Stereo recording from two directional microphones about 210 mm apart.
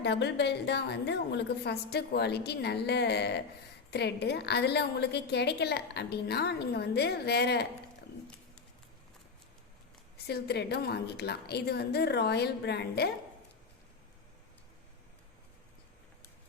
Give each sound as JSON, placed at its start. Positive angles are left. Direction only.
{"t": 0.0, "sound": "a woman's voice", "side_deg": 55}
{"t": 10.2, "sound": "a woman's voice", "side_deg": 50}